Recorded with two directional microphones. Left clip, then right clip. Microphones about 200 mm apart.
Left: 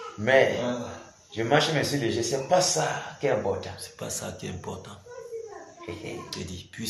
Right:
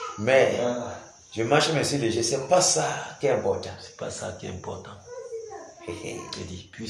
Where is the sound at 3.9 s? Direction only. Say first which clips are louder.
Right 3 dB; 50° left (ahead or behind).